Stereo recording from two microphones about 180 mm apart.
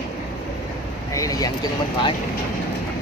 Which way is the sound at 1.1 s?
20° left (ahead or behind).